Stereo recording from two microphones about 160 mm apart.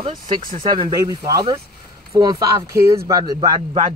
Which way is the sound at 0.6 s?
30° right (ahead or behind).